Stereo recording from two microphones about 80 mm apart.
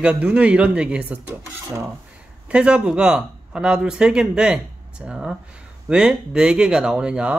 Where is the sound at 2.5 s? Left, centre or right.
Centre.